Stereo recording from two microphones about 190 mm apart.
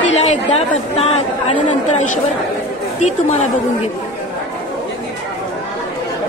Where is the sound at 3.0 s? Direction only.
35° left (ahead or behind).